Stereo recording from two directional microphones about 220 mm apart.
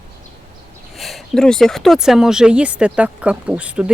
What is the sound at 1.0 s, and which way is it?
Speech, centre (ahead or behind).